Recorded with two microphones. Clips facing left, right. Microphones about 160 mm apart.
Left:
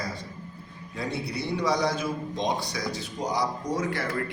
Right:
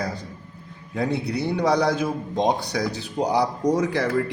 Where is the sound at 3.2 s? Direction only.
65° right (ahead or behind).